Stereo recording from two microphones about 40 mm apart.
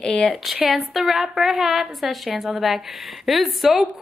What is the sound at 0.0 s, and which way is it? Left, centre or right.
Speech, left.